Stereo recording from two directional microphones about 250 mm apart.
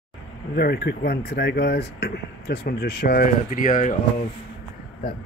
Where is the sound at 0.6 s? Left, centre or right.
Left.